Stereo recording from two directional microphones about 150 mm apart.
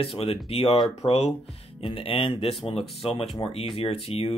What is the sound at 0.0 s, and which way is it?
Speech, 35° left (ahead or behind).